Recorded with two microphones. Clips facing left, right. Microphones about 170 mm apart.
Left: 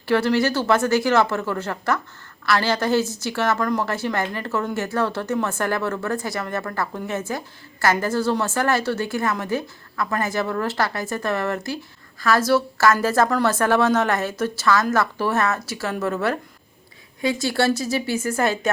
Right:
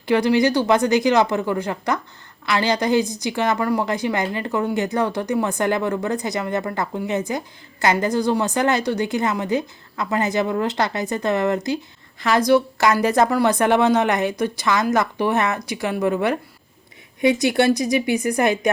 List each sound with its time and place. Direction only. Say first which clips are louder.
0.0 s a woman's voice: right 2 dB; 15° right (ahead or behind)